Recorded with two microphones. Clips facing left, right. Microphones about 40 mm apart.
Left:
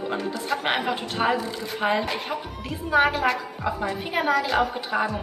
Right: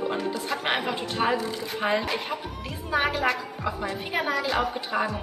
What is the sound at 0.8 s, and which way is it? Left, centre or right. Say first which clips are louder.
Speech: left 2 dB; left.